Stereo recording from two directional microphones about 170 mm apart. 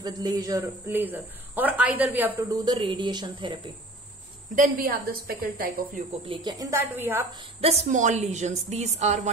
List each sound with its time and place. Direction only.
0.0 s a man's voice: 20° right (ahead or behind)
2.5 s speech: 30° right (ahead or behind)
4.5 s a woman's voice: 55° right (ahead or behind)
6.2 s speech: 25° right (ahead or behind)
7.6 s a woman's voice: 40° right (ahead or behind)